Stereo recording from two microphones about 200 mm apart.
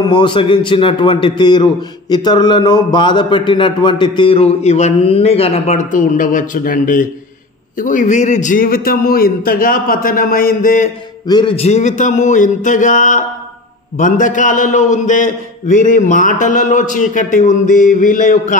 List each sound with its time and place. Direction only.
0.0 s a man's voice: 25° left (ahead or behind); by 10.9 s 45° left (ahead or behind)
11.2 s a man's voice: 25° left (ahead or behind); by 18.6 s 40° left (ahead or behind)